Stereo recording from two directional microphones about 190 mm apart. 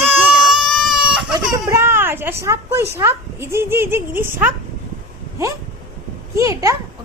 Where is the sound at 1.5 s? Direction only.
15° right (ahead or behind).